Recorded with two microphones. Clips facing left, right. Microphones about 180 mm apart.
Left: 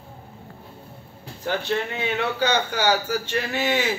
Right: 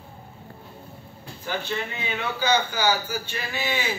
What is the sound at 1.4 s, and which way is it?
A man's voice, 70° left (ahead or behind).